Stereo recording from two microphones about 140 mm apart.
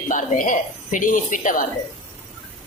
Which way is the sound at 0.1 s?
65° left (ahead or behind).